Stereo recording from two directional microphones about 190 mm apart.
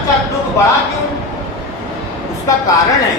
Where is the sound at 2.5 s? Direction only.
15° left (ahead or behind).